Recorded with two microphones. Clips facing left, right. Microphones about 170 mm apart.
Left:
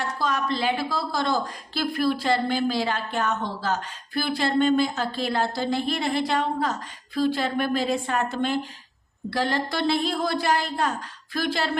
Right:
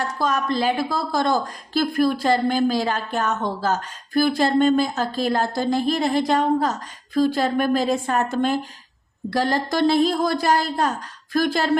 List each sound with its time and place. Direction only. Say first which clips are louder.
0.2 s a woman's voice: right 4 dB; 45° right (ahead or behind)